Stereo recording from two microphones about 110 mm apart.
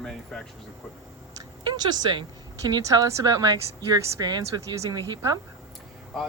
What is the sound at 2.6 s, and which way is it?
A woman's voice, 30° right (ahead or behind).